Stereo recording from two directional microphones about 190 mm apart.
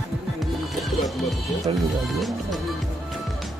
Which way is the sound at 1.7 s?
25° right (ahead or behind).